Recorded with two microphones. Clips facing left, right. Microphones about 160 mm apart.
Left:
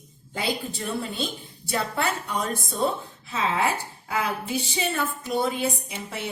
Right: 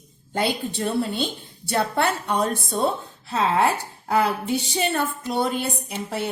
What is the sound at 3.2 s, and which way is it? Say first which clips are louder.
A woman's voice: right 4 dB; 80° right.